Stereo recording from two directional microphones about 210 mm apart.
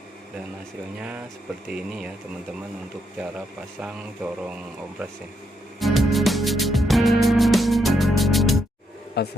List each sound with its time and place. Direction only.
0.9 s speech: 5° right (ahead or behind)
3.2 s speech: 5° right (ahead or behind)
5.8 s music: centre (ahead or behind)
9.2 s speech: 50° left (ahead or behind)